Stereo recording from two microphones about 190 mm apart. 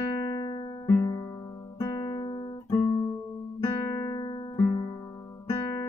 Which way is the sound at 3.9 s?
25° left (ahead or behind).